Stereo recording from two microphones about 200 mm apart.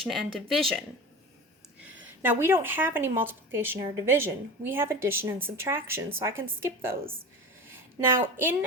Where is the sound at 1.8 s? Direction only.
10° right (ahead or behind).